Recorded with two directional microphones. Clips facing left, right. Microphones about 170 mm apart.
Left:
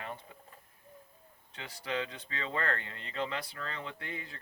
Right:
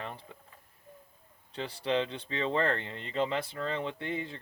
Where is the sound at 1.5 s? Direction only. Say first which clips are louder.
Right 6 dB; 30° right (ahead or behind).